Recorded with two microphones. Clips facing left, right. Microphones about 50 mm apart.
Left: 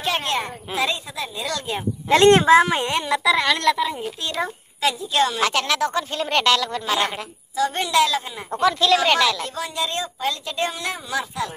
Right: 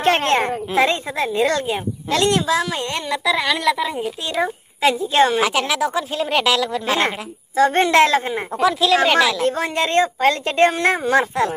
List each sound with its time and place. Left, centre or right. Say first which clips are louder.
0.0 s a woman's voice: right 7 dB; right
2.0 s speech: left 5 dB; left
3.1 s speech: even; centre
4.8 s a woman's voice: right 5 dB; right
5.4 s speech: right 2 dB; centre
7.5 s a woman's voice: right 6 dB; right
8.5 s speech: even; centre
9.6 s speech: right 8 dB; right